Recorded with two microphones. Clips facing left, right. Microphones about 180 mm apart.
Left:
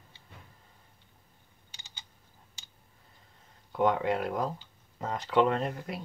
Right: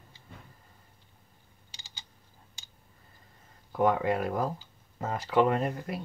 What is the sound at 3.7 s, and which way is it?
Speech, 5° right (ahead or behind).